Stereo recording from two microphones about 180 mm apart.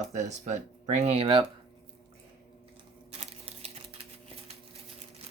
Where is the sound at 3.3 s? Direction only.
35° right (ahead or behind).